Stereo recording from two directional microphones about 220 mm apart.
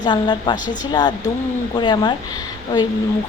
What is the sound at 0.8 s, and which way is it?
A woman's voice, 20° left (ahead or behind).